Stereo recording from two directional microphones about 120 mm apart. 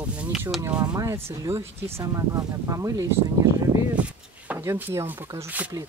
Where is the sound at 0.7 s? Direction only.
35° right (ahead or behind).